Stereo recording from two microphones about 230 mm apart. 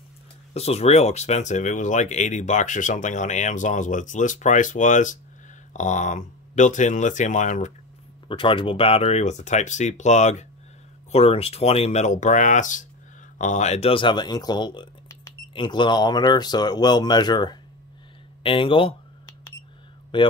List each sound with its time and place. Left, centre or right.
0.6 s speech: left
18.4 s cash register: left
20.1 s speech: left